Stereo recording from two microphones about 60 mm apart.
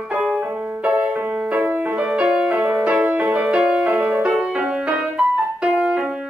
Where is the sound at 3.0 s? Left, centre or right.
Right.